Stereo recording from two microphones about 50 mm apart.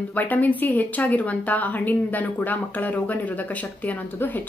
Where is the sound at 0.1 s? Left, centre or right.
Left.